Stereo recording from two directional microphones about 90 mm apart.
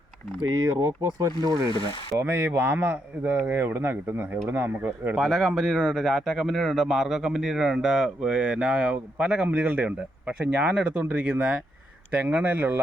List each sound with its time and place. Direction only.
0.8 s speech: 35° right (ahead or behind)
2.1 s speech: 20° right (ahead or behind)
5.1 s speech: 5° right (ahead or behind); by 12.8 s 20° right (ahead or behind)